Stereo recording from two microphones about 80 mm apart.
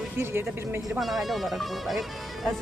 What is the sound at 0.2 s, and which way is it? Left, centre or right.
Speech, right.